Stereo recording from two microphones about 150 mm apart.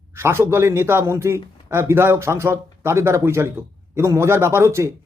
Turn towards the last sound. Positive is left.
turn(degrees=-15)  # may be behind; listen again after turning